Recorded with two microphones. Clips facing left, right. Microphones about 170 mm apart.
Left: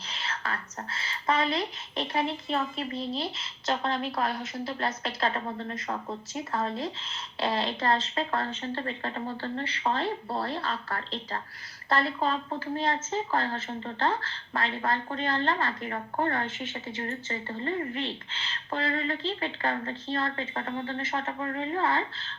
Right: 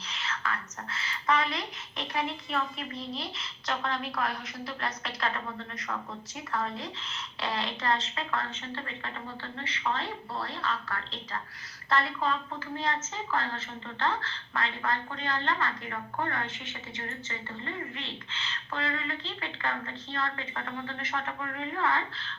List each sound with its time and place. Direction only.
0.1 s speech: 30° left (ahead or behind)